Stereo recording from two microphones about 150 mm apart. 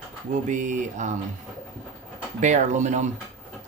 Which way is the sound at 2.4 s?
50° right (ahead or behind).